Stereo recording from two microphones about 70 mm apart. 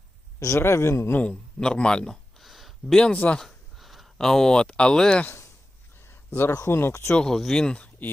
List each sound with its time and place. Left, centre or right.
0.3 s a man's voice: left
1.2 s a man's voice: centre
2.4 s a sound: centre
2.9 s a man's voice: centre
3.3 s speech: centre
6.0 s a sound: left
6.6 s a man's voice: left
7.2 s a man's voice: centre